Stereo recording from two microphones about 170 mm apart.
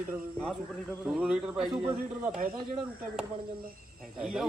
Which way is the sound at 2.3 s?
50° right (ahead or behind).